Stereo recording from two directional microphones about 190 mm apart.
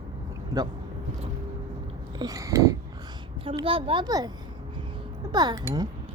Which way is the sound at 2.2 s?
20° right (ahead or behind).